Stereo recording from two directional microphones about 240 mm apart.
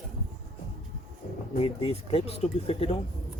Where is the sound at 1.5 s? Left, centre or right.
Left.